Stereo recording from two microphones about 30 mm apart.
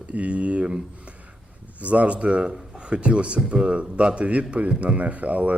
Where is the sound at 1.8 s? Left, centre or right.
Right.